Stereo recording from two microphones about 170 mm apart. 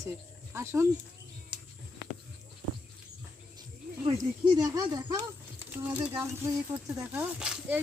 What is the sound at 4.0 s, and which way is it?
Speech, 30° right (ahead or behind).